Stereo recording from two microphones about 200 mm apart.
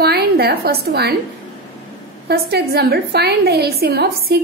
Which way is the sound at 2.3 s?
50° right (ahead or behind).